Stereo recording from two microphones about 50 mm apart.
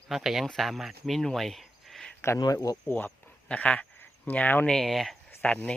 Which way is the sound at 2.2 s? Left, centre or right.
Left.